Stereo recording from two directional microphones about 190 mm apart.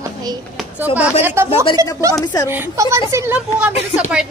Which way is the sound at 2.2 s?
20° left (ahead or behind).